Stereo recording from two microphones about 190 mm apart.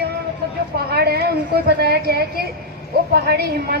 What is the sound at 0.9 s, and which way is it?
A woman's voice, 55° right (ahead or behind).